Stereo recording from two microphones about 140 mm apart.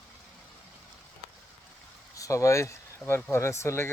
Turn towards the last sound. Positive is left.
turn(degrees=20)  # may be behind; listen again after turning